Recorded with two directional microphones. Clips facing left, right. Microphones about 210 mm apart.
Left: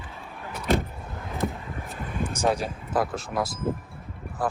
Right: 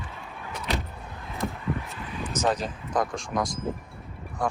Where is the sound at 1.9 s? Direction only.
50° left (ahead or behind).